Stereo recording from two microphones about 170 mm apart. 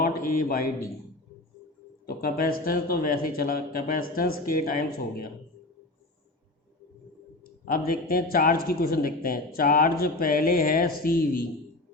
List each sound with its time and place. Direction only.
0.0 s a man's voice: 60° left (ahead or behind)
2.0 s a man's voice: 60° left (ahead or behind)
7.6 s a man's voice: 60° left (ahead or behind)